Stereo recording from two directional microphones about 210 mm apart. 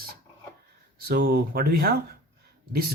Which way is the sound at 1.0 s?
45° right (ahead or behind).